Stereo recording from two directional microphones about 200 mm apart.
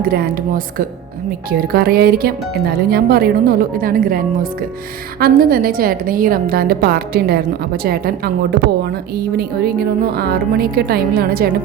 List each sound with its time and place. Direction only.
0.0 s speech: 50° right (ahead or behind)
5.2 s speech: 45° right (ahead or behind)